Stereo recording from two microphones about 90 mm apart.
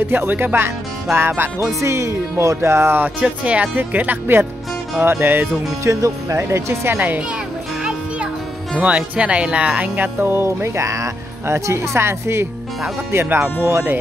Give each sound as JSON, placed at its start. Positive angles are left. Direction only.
{"t": 0.0, "sound": "speech", "side_deg": -20}
{"t": 5.9, "sound": "speech", "side_deg": -35}
{"t": 8.7, "sound": "speech", "side_deg": -15}